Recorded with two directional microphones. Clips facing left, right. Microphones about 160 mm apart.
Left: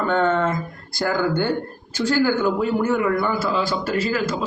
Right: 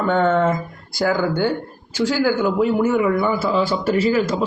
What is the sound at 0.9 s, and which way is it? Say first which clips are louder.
Speech: right 2 dB; 10° right (ahead or behind).